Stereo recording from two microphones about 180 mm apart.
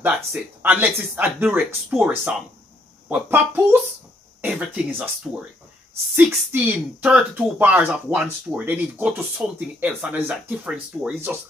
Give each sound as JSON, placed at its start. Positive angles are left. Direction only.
{"t": 0.0, "sound": "speech", "side_deg": -10}
{"t": 6.1, "sound": "speech", "side_deg": -10}